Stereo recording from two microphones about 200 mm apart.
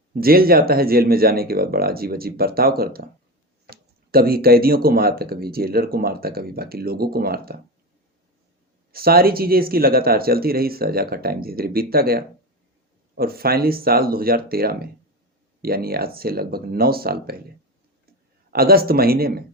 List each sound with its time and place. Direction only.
0.1 s speech: 50° right (ahead or behind)
8.9 s speech: 50° right (ahead or behind)
18.5 s speech: 50° right (ahead or behind)